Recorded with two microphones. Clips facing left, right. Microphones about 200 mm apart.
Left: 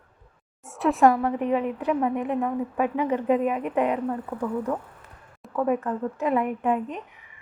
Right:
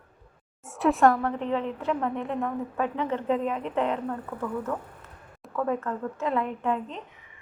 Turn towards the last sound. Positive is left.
turn(degrees=15)  # may be behind; listen again after turning